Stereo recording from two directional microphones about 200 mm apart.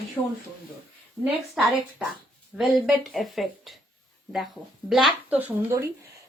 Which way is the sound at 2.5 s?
Centre (ahead or behind).